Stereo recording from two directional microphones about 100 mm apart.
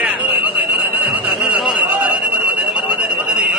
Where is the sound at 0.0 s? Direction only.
15° right (ahead or behind).